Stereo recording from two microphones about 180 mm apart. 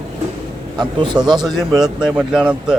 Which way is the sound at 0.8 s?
25° right (ahead or behind).